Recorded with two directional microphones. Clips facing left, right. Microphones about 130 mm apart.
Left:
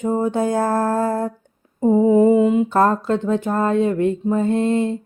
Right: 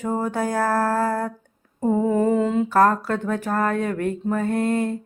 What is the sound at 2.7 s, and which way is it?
Speech, 25° left (ahead or behind).